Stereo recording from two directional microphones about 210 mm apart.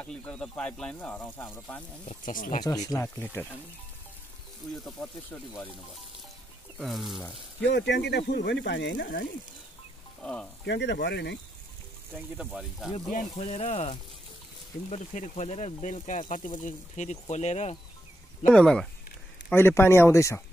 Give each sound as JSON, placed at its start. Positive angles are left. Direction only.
{"t": 0.0, "sound": "speech", "side_deg": 5}
{"t": 2.2, "sound": "speech", "side_deg": 40}
{"t": 2.6, "sound": "speech", "side_deg": 15}
{"t": 4.8, "sound": "speech", "side_deg": 5}
{"t": 6.8, "sound": "speech", "side_deg": 0}
{"t": 7.7, "sound": "speech", "side_deg": 55}
{"t": 10.2, "sound": "speech", "side_deg": 5}
{"t": 10.6, "sound": "speech", "side_deg": 55}
{"t": 12.2, "sound": "speech", "side_deg": -5}
{"t": 13.4, "sound": "speech", "side_deg": 30}
{"t": 18.5, "sound": "speech", "side_deg": 5}